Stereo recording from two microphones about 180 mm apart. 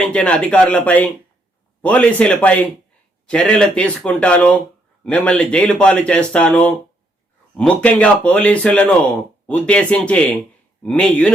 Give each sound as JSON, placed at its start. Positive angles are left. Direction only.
{"t": 0.0, "sound": "speech", "side_deg": 5}